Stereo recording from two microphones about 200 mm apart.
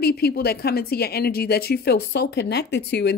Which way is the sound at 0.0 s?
50° left (ahead or behind).